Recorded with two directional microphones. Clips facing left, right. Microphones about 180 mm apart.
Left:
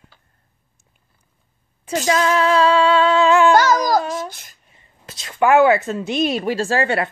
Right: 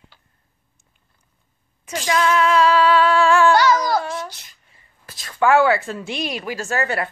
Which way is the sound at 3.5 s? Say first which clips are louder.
Left 2 dB; 40° left (ahead or behind).